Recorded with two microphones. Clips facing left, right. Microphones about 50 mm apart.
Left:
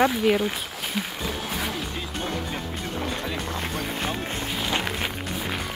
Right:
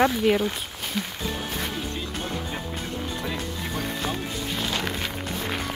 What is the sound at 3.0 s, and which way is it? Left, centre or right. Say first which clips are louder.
Music: left 2 dB; left.